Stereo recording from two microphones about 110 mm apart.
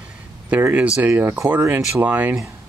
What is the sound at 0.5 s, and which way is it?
Speech, 15° right (ahead or behind).